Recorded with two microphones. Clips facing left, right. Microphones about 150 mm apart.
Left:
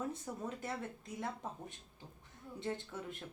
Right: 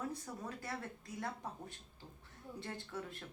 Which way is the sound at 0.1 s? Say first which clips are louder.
Left 3 dB; 20° left (ahead or behind).